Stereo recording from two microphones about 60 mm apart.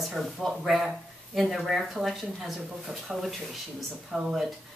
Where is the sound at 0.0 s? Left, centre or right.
Centre.